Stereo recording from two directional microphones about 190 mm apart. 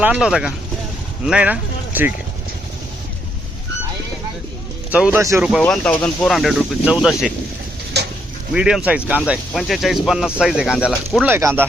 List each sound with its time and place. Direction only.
0.0 s speech: 5° right (ahead or behind)
4.9 s speech: 5° right (ahead or behind)
5.5 s speech: centre (ahead or behind)
7.9 s a sound: 60° right (ahead or behind)
8.5 s speech: 5° right (ahead or behind)
11.3 s speech: 15° right (ahead or behind)